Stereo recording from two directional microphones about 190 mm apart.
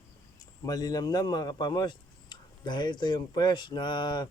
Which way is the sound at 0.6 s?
20° left (ahead or behind).